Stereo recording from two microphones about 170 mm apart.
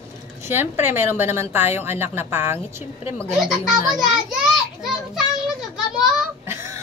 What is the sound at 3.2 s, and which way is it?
Speech, centre (ahead or behind).